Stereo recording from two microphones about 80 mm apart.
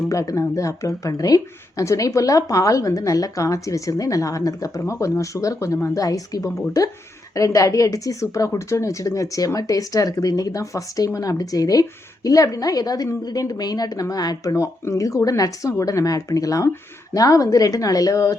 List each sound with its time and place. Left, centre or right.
0.1 s speech: left
14.5 s speech: left